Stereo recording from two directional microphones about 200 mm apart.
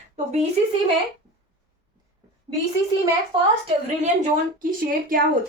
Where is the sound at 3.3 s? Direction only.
25° right (ahead or behind).